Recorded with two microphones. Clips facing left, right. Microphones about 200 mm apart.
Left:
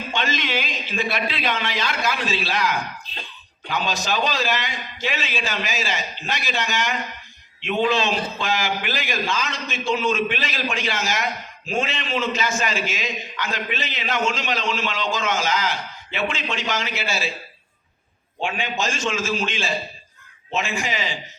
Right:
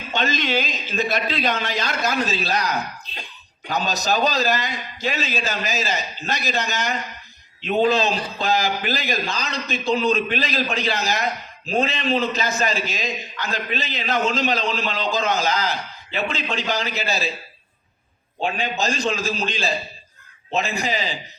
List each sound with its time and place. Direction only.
0.1 s a man's voice: 40° right (ahead or behind)
18.4 s a man's voice: 40° right (ahead or behind)